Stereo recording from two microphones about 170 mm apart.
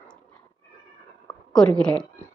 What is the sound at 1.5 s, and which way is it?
Speech, 5° left (ahead or behind).